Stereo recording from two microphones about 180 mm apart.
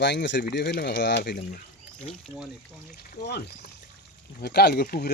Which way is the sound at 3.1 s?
60° left (ahead or behind).